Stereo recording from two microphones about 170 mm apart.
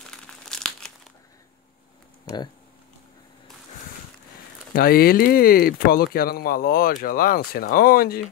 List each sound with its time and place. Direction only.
0.1 s crumpling: 5° left (ahead or behind)
4.7 s speech: 60° left (ahead or behind)